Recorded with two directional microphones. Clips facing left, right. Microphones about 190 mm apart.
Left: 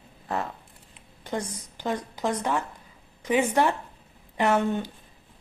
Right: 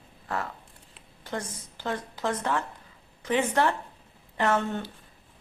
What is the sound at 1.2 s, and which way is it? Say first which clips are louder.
A woman's voice: left 3 dB; 15° left (ahead or behind).